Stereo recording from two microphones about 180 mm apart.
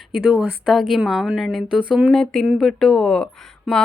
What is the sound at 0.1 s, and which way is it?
A woman's voice, 5° right (ahead or behind).